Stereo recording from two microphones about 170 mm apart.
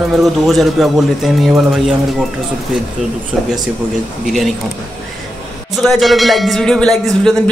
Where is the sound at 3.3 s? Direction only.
5° right (ahead or behind).